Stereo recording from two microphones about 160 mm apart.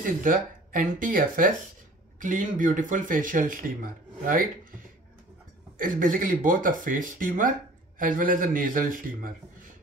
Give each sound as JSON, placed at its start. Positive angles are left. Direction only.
{"t": 0.0, "sound": "speech", "side_deg": -55}
{"t": 5.8, "sound": "speech", "side_deg": -60}